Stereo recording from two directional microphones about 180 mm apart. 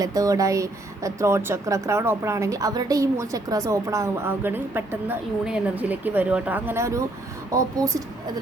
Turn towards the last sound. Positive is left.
turn(degrees=-15)  # may be behind; listen again after turning